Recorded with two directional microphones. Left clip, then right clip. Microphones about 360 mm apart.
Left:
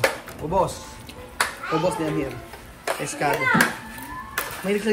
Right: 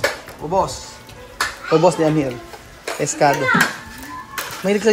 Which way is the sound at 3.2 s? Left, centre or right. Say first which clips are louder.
Right 8 dB; centre.